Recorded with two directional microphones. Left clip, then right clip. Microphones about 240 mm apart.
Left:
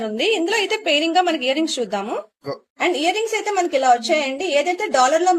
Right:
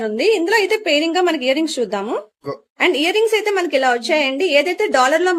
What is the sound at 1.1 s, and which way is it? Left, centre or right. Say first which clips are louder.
A woman's voice: right 1 dB; right.